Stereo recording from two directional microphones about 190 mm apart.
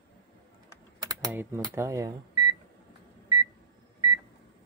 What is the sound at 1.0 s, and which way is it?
Typing, 15° right (ahead or behind).